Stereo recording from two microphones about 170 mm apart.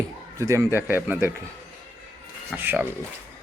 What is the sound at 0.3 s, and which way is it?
Speech, 20° right (ahead or behind).